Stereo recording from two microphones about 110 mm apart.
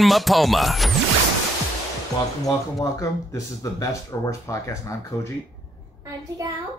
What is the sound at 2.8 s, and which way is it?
Speech, 30° left (ahead or behind).